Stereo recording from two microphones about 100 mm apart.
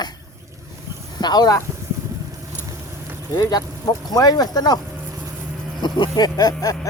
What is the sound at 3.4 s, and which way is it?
Speech, 40° left (ahead or behind).